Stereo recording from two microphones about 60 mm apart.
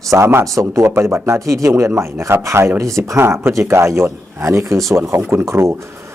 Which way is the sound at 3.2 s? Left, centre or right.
Right.